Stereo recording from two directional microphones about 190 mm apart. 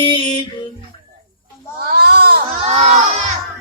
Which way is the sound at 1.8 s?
55° right (ahead or behind).